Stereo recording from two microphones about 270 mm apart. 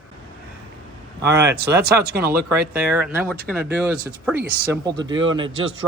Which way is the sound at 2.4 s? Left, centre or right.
Centre.